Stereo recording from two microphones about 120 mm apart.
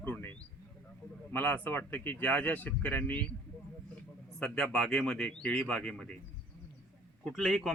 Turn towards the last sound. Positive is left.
turn(degrees=0)  # may be behind; listen again after turning